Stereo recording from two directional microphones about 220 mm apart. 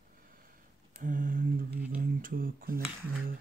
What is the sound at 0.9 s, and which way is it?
Speech, 40° right (ahead or behind).